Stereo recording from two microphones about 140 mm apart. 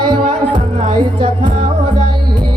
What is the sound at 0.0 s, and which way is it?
Music, 35° right (ahead or behind).